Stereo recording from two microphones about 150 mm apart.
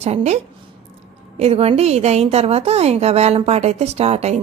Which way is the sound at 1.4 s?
40° right (ahead or behind).